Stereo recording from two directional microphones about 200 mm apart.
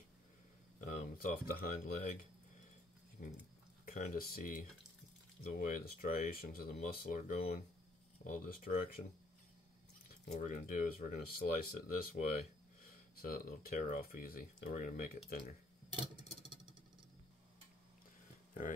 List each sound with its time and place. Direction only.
0.8 s speech: 45° left (ahead or behind)
3.2 s speech: 45° left (ahead or behind)
10.3 s speech: 40° left (ahead or behind)